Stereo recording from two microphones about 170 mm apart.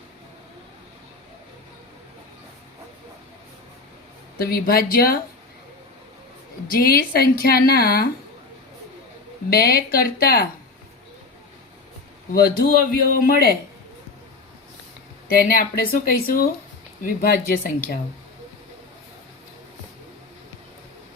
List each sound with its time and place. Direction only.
4.4 s a woman's voice: 60° left (ahead or behind)
6.7 s a woman's voice: 60° left (ahead or behind)
9.5 s a woman's voice: 60° left (ahead or behind)
12.3 s a woman's voice: 60° left (ahead or behind)
15.3 s a woman's voice: 60° left (ahead or behind)